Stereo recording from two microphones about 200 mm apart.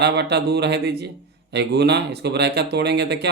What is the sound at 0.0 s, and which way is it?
Speech, 55° right (ahead or behind).